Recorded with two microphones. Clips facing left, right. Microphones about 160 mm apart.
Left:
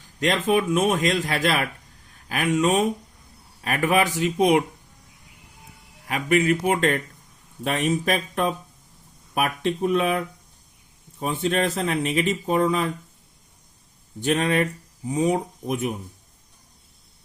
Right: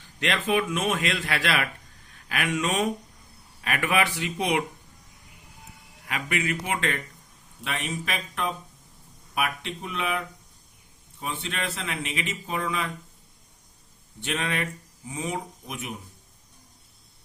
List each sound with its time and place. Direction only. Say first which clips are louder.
0.2 s speech: left 4 dB; 40° left (ahead or behind)
6.3 s speech: left 9 dB; 40° left (ahead or behind)
14.2 s speech: left 8 dB; 40° left (ahead or behind)